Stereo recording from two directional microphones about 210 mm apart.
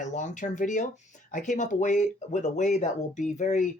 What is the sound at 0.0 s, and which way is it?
Speech, 35° left (ahead or behind).